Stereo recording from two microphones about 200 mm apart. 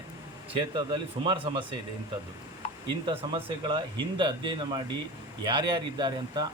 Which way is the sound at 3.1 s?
25° right (ahead or behind).